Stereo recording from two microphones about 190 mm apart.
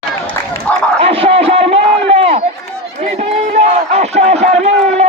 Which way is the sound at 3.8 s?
35° right (ahead or behind).